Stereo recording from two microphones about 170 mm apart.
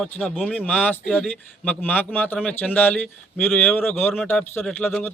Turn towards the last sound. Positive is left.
turn(degrees=10)  # may be behind; listen again after turning